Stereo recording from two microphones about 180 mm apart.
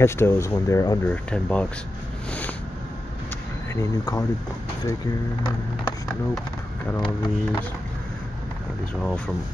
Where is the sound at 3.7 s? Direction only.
15° left (ahead or behind).